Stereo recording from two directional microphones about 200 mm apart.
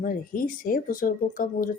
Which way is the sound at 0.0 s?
45° left (ahead or behind).